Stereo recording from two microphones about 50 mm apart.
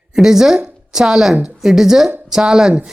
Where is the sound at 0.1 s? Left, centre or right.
Centre.